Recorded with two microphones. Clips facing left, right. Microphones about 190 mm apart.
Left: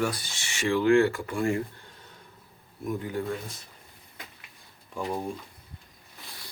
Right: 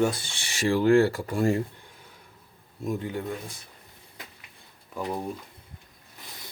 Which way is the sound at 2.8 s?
25° right (ahead or behind).